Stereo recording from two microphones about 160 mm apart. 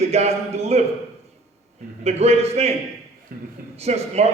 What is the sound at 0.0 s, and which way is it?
Speech, 40° right (ahead or behind).